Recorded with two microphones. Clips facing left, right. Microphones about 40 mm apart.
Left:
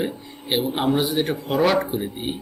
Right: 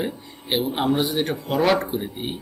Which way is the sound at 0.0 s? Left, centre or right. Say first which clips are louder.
Left 1 dB; centre.